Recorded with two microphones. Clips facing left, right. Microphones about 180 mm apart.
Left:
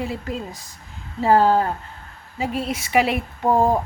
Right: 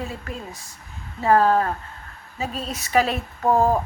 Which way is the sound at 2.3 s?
15° left (ahead or behind).